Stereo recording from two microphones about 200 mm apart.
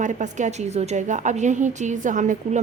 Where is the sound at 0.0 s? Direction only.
40° right (ahead or behind).